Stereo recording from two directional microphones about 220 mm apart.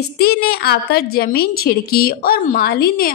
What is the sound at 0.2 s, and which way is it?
A woman's voice, 45° left (ahead or behind).